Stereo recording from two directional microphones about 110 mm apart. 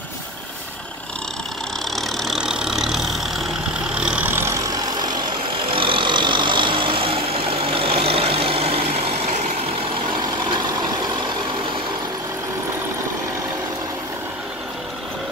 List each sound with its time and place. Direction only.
2.0 s vehicle: centre (ahead or behind); by 5.1 s 35° right (ahead or behind)
5.5 s vehicle: 55° right (ahead or behind); by 9.5 s 75° right (ahead or behind)